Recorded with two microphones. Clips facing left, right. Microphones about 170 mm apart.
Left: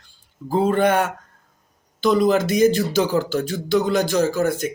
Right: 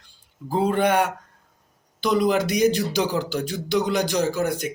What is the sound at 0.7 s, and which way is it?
Speech, 15° right (ahead or behind).